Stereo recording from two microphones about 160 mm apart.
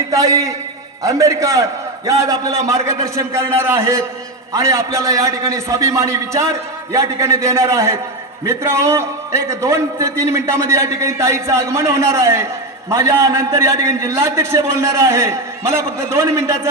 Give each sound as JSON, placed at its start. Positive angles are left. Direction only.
{"t": 0.1, "sound": "a man's voice", "side_deg": -20}